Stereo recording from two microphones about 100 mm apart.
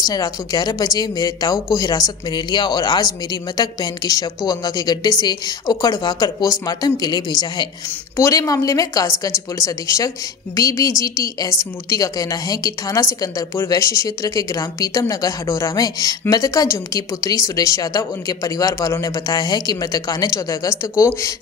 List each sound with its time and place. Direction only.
0.0 s a woman's voice: 40° left (ahead or behind)